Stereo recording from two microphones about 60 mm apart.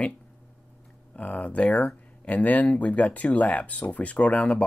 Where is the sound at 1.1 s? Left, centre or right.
Left.